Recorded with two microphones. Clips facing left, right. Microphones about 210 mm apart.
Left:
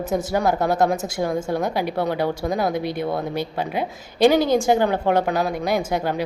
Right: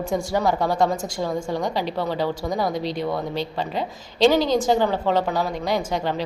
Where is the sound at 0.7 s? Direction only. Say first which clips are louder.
Left 2 dB; 5° left (ahead or behind).